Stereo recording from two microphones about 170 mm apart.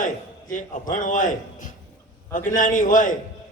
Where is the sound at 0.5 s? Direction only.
50° left (ahead or behind).